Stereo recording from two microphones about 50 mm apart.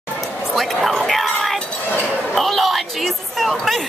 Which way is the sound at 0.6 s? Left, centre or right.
Centre.